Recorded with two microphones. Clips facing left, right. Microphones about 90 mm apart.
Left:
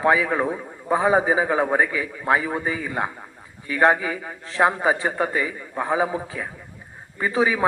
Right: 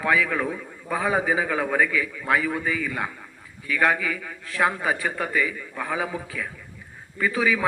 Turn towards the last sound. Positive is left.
turn(degrees=30)  # may be behind; listen again after turning